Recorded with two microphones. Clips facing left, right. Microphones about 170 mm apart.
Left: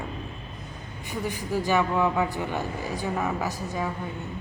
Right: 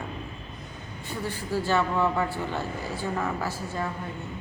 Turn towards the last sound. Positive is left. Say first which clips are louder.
# left 1 dB
turn(degrees=15)  # may be behind; listen again after turning